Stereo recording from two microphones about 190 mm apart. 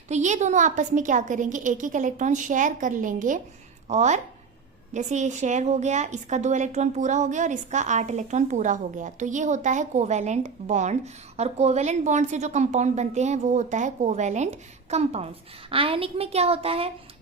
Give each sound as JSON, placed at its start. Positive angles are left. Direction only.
{"t": 0.1, "sound": "a woman's voice", "side_deg": -35}